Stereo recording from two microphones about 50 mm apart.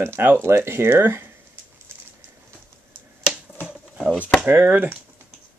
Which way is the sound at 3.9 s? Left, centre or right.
Centre.